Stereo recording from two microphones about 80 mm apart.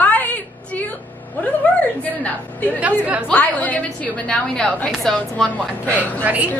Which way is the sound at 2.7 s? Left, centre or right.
Centre.